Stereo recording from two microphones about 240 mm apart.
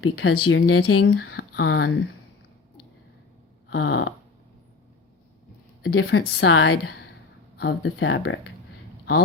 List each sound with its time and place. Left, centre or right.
0.0 s speech: left
1.0 s speech: left
3.7 s snoring: left
5.8 s a woman's voice: left